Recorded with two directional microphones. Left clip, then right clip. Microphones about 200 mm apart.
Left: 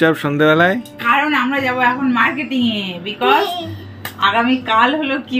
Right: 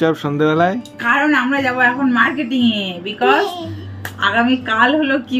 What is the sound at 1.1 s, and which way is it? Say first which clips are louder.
A woman's voice: right 1 dB; 20° right (ahead or behind).